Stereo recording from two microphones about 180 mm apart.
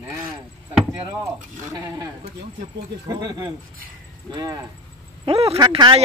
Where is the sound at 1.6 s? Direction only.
20° right (ahead or behind).